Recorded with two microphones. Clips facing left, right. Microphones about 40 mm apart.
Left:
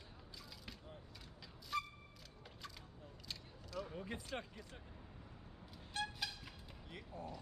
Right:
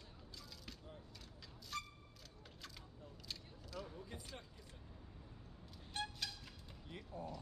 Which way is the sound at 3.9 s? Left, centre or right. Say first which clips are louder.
Left 6 dB; left.